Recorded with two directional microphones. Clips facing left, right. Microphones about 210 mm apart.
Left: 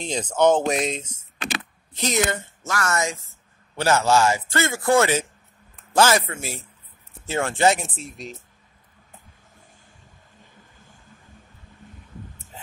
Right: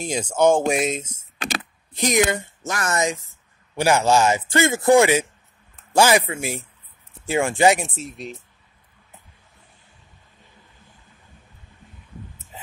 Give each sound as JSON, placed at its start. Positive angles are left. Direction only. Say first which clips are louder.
{"t": 0.0, "sound": "speech", "louder": "right 1 dB", "side_deg": -10}
{"t": 1.1, "sound": "a sound", "louder": "right 2 dB", "side_deg": -40}
{"t": 2.0, "sound": "speech", "louder": "right 4 dB", "side_deg": -15}
{"t": 8.0, "sound": "speech", "louder": "right 3 dB", "side_deg": 0}